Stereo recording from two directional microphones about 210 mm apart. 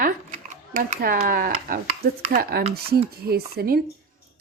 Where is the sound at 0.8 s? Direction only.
45° right (ahead or behind).